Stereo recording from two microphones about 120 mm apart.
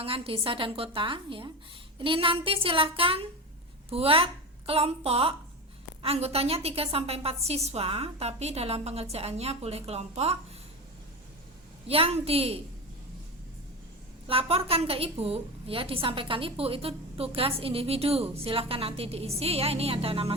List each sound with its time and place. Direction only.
0.0 s a woman's voice: 50° right (ahead or behind)
11.9 s a woman's voice: 50° right (ahead or behind)
14.3 s a woman's voice: 55° right (ahead or behind)